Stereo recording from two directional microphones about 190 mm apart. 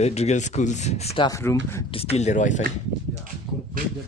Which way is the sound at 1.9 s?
30° left (ahead or behind).